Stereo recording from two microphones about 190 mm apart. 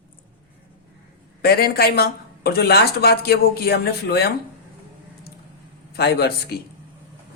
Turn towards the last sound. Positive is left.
turn(degrees=60)  # may be behind; listen again after turning